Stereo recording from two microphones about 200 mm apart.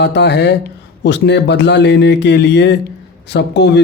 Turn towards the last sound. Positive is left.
turn(degrees=60)  # may be behind; listen again after turning